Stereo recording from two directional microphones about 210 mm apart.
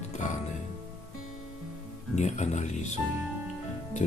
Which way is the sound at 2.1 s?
35° left (ahead or behind).